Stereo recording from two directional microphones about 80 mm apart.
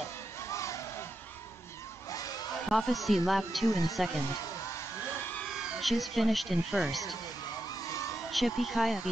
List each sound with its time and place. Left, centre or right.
0.5 s a sound: left
2.0 s a sound: left
2.7 s speech: centre
3.6 s speech: left
5.5 s speech: centre
7.8 s vehicle: left
8.3 s speech: centre